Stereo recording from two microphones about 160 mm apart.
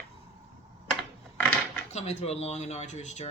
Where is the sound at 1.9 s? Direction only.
45° left (ahead or behind).